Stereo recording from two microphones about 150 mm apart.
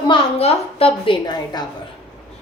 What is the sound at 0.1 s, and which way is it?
A woman's voice, 40° left (ahead or behind).